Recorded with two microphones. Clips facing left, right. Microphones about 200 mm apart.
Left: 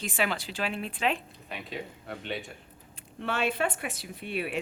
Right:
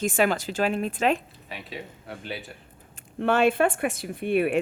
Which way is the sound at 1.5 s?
Centre (ahead or behind).